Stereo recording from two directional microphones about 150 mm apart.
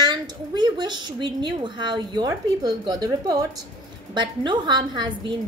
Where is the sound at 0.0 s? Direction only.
30° right (ahead or behind).